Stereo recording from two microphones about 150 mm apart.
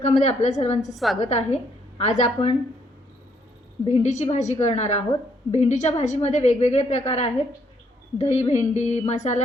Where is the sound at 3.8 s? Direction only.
50° left (ahead or behind).